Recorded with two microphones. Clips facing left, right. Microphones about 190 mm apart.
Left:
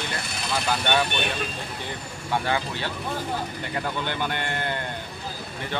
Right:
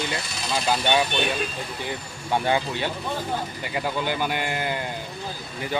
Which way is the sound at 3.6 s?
10° right (ahead or behind).